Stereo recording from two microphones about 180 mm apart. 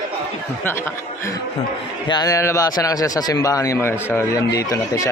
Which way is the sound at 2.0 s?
25° left (ahead or behind).